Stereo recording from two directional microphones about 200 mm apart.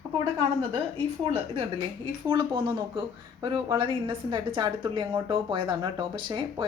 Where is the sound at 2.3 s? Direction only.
25° right (ahead or behind).